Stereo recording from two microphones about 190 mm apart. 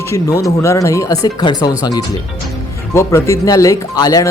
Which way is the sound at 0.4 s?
15° left (ahead or behind).